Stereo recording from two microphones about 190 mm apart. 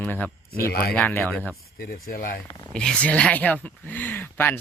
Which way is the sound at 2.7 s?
5° left (ahead or behind).